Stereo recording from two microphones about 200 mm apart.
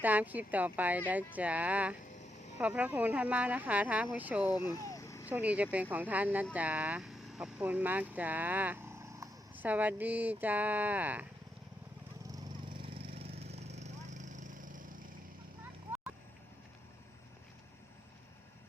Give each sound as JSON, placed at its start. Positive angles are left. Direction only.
{"t": 0.0, "sound": "speech", "side_deg": -10}
{"t": 2.1, "sound": "a sound", "side_deg": 35}
{"t": 2.6, "sound": "speech", "side_deg": -5}
{"t": 4.7, "sound": "vehicle", "side_deg": 15}
{"t": 5.3, "sound": "speech", "side_deg": -5}
{"t": 12.3, "sound": "a sound", "side_deg": -25}